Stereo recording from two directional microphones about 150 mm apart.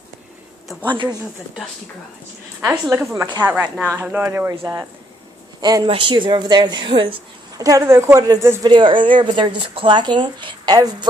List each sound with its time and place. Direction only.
2.7 s speech: 15° right (ahead or behind); by 7.2 s 35° right (ahead or behind)
7.5 s a woman's voice: 25° right (ahead or behind)
8.7 s speech: 35° right (ahead or behind)